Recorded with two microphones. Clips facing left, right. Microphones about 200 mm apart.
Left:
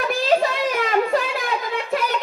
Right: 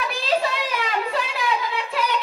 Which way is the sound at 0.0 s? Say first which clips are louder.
Left 4 dB; 45° left (ahead or behind).